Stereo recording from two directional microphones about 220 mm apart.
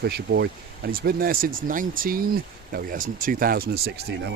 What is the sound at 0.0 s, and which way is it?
Speech, 50° right (ahead or behind).